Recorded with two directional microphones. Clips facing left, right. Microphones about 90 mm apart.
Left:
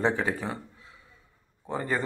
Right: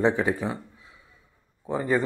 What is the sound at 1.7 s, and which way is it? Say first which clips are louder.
Speech: right 5 dB; 10° right (ahead or behind).